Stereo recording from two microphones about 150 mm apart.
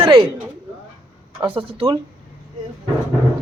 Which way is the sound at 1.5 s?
40° right (ahead or behind).